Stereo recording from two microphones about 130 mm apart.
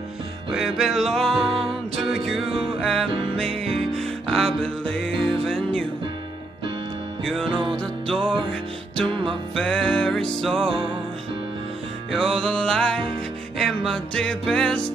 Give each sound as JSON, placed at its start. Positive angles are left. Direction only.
{"t": 0.6, "sound": "music", "side_deg": 0}
{"t": 1.4, "sound": "music", "side_deg": -45}
{"t": 2.0, "sound": "music", "side_deg": 0}
{"t": 7.2, "sound": "music", "side_deg": 5}
{"t": 12.4, "sound": "music", "side_deg": 5}